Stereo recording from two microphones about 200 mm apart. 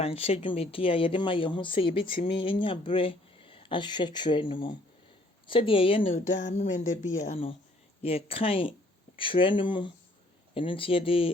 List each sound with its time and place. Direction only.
0.0 s speech: 30° left (ahead or behind)
6.0 s speech: 40° left (ahead or behind)